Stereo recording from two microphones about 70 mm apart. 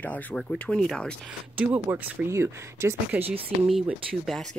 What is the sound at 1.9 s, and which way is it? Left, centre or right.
Speech, right.